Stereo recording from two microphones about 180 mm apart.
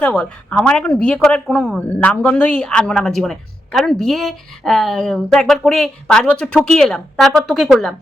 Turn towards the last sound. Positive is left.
turn(degrees=0)  # may be behind; listen again after turning